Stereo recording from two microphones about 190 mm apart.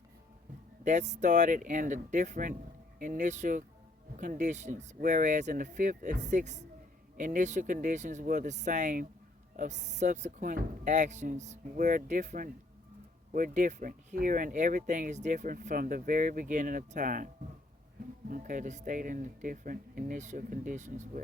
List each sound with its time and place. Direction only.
0.9 s speech: 40° right (ahead or behind)